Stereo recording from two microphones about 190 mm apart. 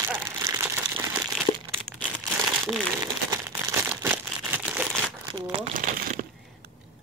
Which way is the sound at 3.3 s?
15° right (ahead or behind).